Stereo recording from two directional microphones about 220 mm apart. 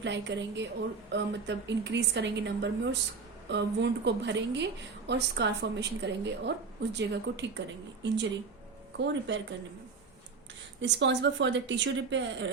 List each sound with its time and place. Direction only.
0.0 s a woman's voice: 55° right (ahead or behind)
10.8 s speech: 55° right (ahead or behind)